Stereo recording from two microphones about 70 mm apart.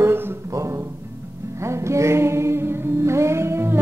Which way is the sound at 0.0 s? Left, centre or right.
Right.